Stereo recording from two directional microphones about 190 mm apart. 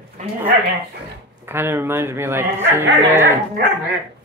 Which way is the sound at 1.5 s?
10° right (ahead or behind).